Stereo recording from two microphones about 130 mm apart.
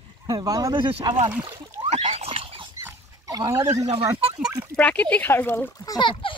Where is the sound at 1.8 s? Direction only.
55° right (ahead or behind).